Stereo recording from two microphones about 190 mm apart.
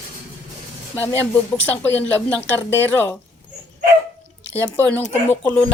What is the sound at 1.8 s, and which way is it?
Speech, 10° left (ahead or behind).